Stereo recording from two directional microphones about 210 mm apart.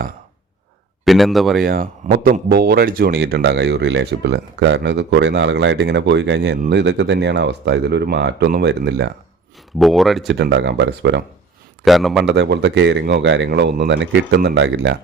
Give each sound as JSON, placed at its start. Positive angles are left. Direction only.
{"t": 1.0, "sound": "speech", "side_deg": 0}
{"t": 1.6, "sound": "a man's voice", "side_deg": -45}
{"t": 9.7, "sound": "speech", "side_deg": 0}
{"t": 10.3, "sound": "speech", "side_deg": -55}
{"t": 11.9, "sound": "speech", "side_deg": 0}
{"t": 12.3, "sound": "speech", "side_deg": -55}